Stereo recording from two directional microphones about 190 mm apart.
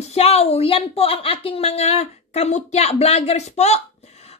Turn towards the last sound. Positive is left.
turn(degrees=35)  # may be behind; listen again after turning